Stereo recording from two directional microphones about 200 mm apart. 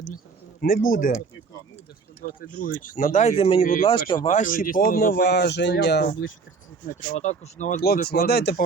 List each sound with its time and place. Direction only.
0.6 s speech: 45° left (ahead or behind)
2.2 s speech: 45° left (ahead or behind)
6.8 s speech: 35° left (ahead or behind)
7.8 s speech: 50° left (ahead or behind)